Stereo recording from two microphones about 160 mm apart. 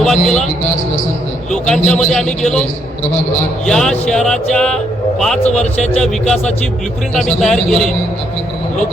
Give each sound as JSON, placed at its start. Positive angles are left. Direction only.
{"t": 0.0, "sound": "speech", "side_deg": 5}
{"t": 1.5, "sound": "speech", "side_deg": 5}
{"t": 3.7, "sound": "speech", "side_deg": 5}
{"t": 5.5, "sound": "a man's voice", "side_deg": 45}
{"t": 5.9, "sound": "speech", "side_deg": 5}